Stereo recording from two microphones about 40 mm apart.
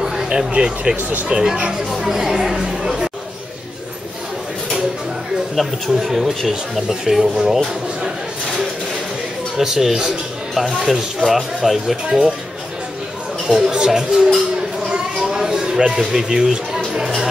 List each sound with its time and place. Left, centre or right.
0.0 s a sound: centre
0.3 s speech: right
5.9 s speech: centre
9.6 s speech: centre
13.5 s a sound: centre
15.9 s speech: centre